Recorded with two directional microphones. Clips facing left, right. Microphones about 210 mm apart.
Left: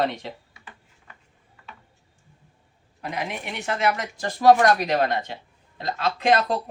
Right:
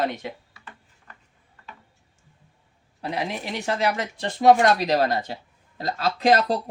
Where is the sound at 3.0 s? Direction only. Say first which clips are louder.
Right 2 dB; 35° right (ahead or behind).